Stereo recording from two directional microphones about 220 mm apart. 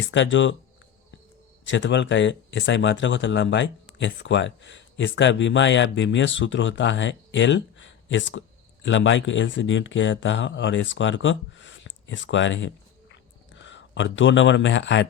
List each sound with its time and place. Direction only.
0.1 s speech: 55° left (ahead or behind)
1.6 s speech: 55° left (ahead or behind)